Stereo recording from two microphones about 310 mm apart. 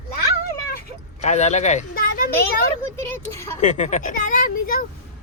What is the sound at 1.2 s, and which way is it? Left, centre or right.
Speech, left.